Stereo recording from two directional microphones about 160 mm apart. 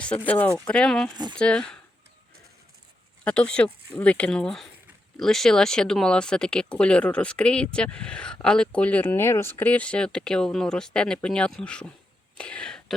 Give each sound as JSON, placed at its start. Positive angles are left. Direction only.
{"t": 0.3, "sound": "speech", "side_deg": 10}
{"t": 1.1, "sound": "speech", "side_deg": -25}
{"t": 1.4, "sound": "speech", "side_deg": 5}
{"t": 3.2, "sound": "speech", "side_deg": 5}